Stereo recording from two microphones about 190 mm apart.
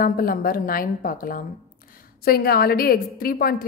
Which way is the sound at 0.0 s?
50° left (ahead or behind).